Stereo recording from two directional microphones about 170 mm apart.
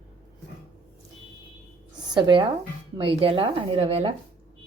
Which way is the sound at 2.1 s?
25° right (ahead or behind).